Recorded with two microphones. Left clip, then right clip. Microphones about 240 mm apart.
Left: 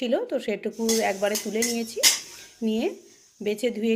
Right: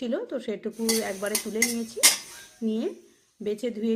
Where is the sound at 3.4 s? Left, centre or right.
Centre.